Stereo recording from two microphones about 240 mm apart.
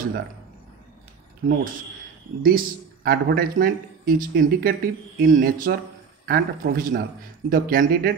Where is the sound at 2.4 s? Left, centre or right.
Right.